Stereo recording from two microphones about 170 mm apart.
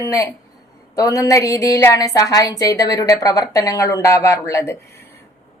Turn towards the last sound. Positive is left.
turn(degrees=15)  # may be behind; listen again after turning